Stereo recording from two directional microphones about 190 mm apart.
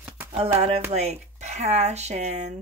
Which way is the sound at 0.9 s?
35° right (ahead or behind).